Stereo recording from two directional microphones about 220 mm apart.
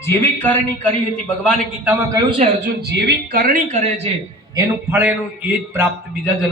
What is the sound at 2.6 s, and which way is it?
A man's voice, 50° right (ahead or behind).